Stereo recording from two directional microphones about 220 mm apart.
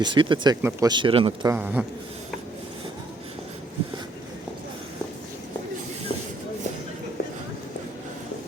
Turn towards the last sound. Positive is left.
turn(degrees=45)  # may be behind; listen again after turning